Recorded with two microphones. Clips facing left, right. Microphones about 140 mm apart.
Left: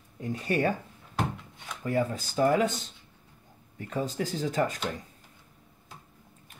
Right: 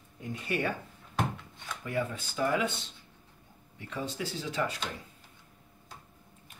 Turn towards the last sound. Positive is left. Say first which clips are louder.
# left 5 dB
turn(degrees=45)  # may be behind; listen again after turning